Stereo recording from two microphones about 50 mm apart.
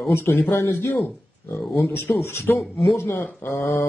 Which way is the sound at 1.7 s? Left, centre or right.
Left.